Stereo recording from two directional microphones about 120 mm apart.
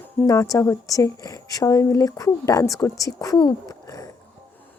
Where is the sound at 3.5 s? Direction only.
30° left (ahead or behind).